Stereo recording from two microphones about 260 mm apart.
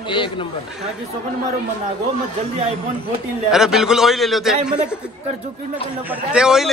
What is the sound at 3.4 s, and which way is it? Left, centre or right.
A man's voice, centre.